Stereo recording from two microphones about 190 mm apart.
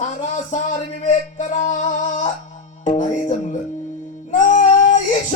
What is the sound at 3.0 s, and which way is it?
Speech, 40° left (ahead or behind).